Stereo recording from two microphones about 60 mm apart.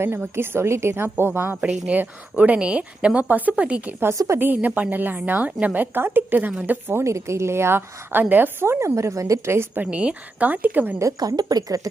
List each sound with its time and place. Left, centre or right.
0.0 s a woman's voice: right
1.6 s a woman's voice: right
3.2 s a woman's voice: right
4.2 s a woman's voice: right
4.5 s a woman's voice: right
7.0 s a woman's voice: right
8.8 s a woman's voice: right
9.7 s a woman's voice: right
11.0 s a woman's voice: right